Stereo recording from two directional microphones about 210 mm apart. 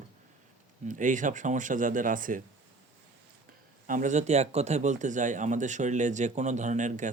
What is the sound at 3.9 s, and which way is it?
Speech, 35° right (ahead or behind).